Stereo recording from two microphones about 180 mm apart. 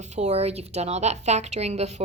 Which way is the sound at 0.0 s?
40° right (ahead or behind).